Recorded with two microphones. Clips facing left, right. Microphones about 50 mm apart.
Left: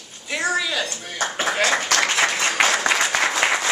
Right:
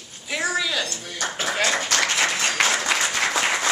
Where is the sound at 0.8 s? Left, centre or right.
Left.